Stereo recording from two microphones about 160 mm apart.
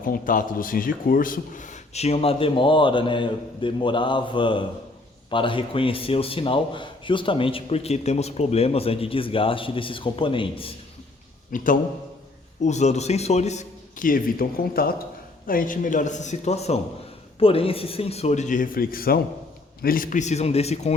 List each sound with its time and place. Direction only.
0.0 s a man's voice: 60° left (ahead or behind); by 10.8 s 35° left (ahead or behind)
11.5 s a man's voice: 55° left (ahead or behind)
12.6 s a man's voice: 45° left (ahead or behind)